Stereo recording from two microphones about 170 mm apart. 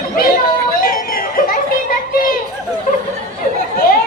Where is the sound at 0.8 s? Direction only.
60° left (ahead or behind).